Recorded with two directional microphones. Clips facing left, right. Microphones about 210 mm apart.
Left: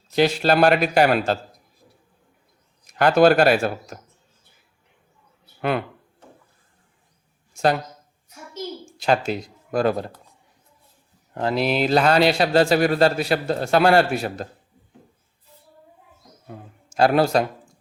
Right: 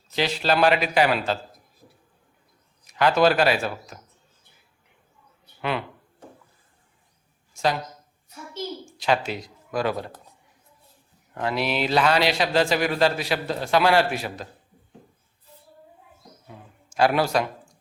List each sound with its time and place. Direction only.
0.2 s a man's voice: 50° left (ahead or behind)
3.0 s a man's voice: 50° left (ahead or behind)
9.0 s speech: 40° left (ahead or behind)
11.3 s a man's voice: 40° left (ahead or behind)
17.1 s speech: 35° left (ahead or behind)